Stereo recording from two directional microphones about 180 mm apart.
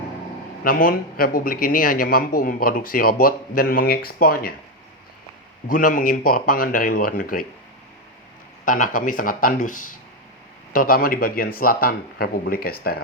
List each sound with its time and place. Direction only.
0.6 s a man's voice: 50° left (ahead or behind)
5.6 s a man's voice: 50° left (ahead or behind)
8.6 s a man's voice: 45° left (ahead or behind)